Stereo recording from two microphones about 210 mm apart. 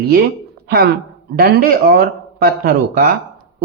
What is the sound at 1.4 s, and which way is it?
Speech, 45° right (ahead or behind).